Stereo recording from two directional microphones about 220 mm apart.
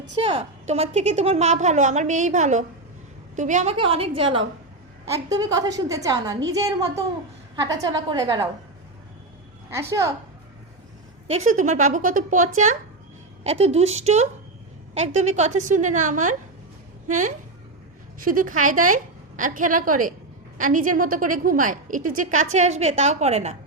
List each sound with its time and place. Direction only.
0.2 s a woman's voice: 25° right (ahead or behind)
9.6 s a woman's voice: 10° right (ahead or behind)
11.4 s a woman's voice: 35° right (ahead or behind)